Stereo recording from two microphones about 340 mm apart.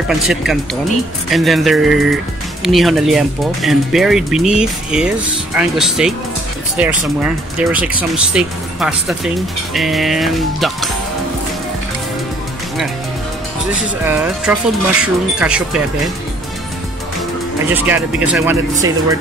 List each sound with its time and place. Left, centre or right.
0.1 s speech: centre
14.0 s speech: centre
17.6 s speech: centre